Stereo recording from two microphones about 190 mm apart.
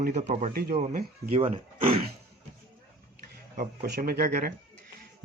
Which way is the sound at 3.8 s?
55° right (ahead or behind).